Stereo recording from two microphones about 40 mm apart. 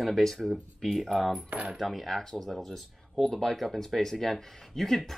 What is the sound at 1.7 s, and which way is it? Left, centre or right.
Speech, centre.